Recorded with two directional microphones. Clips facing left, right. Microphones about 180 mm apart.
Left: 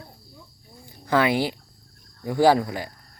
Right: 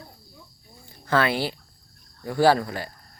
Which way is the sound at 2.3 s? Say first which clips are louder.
Left 1 dB; 15° left (ahead or behind).